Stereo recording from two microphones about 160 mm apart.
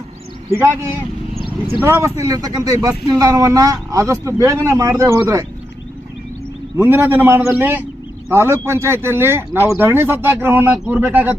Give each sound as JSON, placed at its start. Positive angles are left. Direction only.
{"t": 0.5, "sound": "speech", "side_deg": -15}
{"t": 6.7, "sound": "speech", "side_deg": -15}